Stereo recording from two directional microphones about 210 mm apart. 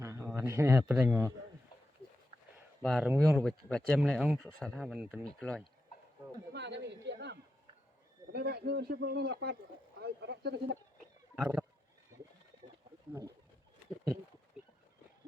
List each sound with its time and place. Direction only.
0.0 s a sound: 15° right (ahead or behind)
0.3 s speech: 10° right (ahead or behind)
2.8 s speech: centre (ahead or behind)
6.5 s a sound: 55° right (ahead or behind)
8.3 s speech: 50° right (ahead or behind)
11.3 s speech: 5° right (ahead or behind)